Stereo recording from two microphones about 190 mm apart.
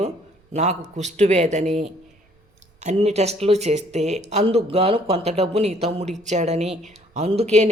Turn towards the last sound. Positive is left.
turn(degrees=-35)  # may be behind; listen again after turning